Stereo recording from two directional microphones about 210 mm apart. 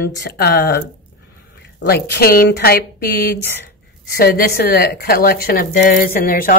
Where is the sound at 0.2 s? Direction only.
55° left (ahead or behind).